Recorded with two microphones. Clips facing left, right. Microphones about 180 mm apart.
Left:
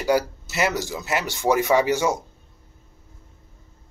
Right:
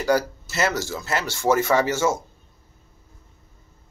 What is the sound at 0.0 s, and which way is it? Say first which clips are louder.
Speech: even; 15° left (ahead or behind).